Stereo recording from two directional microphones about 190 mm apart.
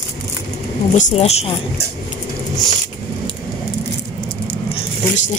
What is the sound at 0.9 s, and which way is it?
Speech, 35° left (ahead or behind).